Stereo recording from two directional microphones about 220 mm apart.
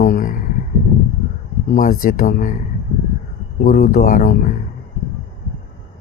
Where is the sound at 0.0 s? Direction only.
40° left (ahead or behind).